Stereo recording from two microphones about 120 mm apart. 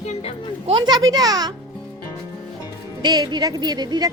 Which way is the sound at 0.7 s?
35° right (ahead or behind).